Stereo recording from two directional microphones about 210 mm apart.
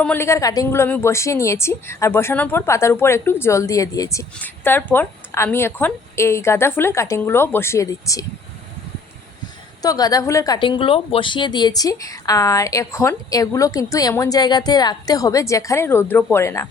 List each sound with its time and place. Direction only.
0.0 s a woman's voice: 10° left (ahead or behind)
9.8 s a woman's voice: 15° left (ahead or behind)